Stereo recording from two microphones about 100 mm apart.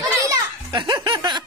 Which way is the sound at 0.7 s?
50° right (ahead or behind).